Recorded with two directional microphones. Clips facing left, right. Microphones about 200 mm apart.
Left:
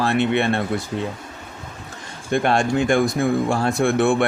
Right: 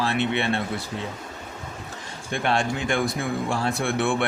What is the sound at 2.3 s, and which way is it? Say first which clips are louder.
Speech: left 6 dB; 45° left (ahead or behind).